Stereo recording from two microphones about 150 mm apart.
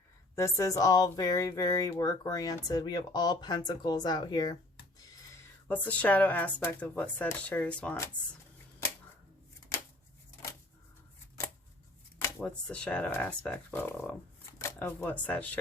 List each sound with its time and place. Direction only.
0.3 s speech: 20° left (ahead or behind)
5.6 s speech: 10° left (ahead or behind)
9.7 s a sound: 20° left (ahead or behind)
12.5 s speech: 5° left (ahead or behind)